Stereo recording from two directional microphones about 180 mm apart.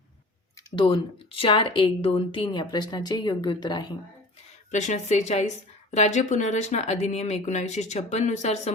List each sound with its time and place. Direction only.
0.8 s a woman's voice: 25° left (ahead or behind)
4.7 s speech: 40° left (ahead or behind)